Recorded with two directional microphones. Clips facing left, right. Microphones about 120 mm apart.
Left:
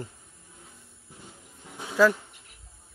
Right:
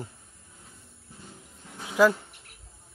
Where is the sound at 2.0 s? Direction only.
15° right (ahead or behind).